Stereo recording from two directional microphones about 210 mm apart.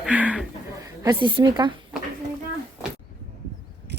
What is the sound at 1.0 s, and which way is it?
Speech, 20° right (ahead or behind).